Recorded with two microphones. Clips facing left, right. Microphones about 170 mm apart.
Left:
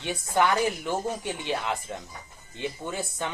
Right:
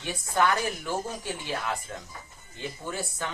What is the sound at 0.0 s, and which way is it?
Speech, 20° left (ahead or behind).